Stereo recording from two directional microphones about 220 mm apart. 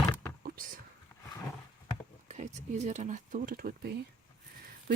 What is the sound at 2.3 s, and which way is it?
Speech, 30° right (ahead or behind).